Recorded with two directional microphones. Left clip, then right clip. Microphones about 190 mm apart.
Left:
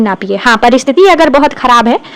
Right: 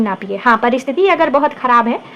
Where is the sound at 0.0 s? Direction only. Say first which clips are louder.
Left 5 dB; 35° left (ahead or behind).